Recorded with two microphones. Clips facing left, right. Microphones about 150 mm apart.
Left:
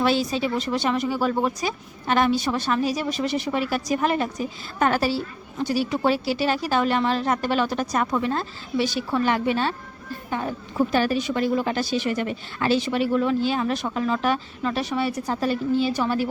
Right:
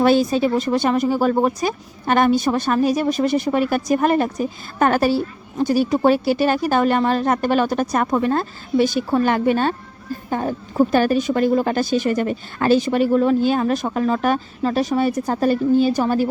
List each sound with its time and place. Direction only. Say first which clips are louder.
0.0 s a woman's voice: right 6 dB; 50° right (ahead or behind)